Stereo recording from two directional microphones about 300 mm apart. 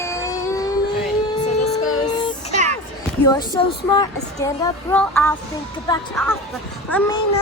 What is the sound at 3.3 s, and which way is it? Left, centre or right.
Speech, centre.